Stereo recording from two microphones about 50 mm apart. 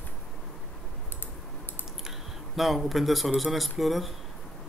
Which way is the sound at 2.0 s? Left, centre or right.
Centre.